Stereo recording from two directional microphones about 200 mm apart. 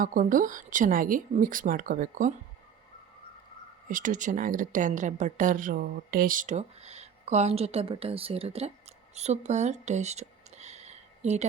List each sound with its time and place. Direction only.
0.0 s speech: 45° right (ahead or behind)
3.8 s a woman's voice: 40° right (ahead or behind)